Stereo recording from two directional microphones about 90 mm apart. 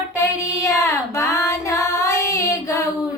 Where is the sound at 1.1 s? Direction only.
35° left (ahead or behind).